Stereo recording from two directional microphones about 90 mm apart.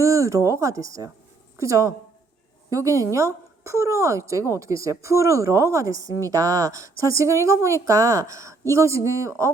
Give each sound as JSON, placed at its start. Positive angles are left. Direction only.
{"t": 0.0, "sound": "a woman's voice", "side_deg": -35}